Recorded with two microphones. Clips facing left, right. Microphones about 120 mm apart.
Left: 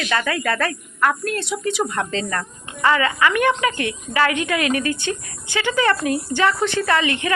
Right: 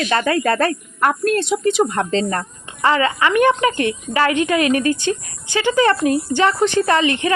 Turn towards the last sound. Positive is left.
turn(degrees=-30)  # may be behind; listen again after turning